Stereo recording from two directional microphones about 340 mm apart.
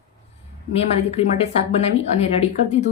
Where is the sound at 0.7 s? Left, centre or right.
Centre.